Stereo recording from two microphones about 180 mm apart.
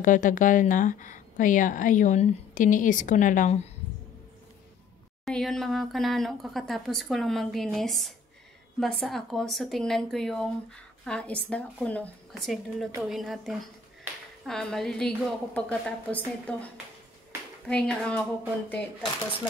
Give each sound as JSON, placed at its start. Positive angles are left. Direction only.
{"t": 0.0, "sound": "a woman's voice", "side_deg": 45}
{"t": 5.2, "sound": "speech", "side_deg": 0}